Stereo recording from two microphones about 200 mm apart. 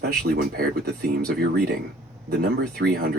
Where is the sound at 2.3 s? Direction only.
50° right (ahead or behind).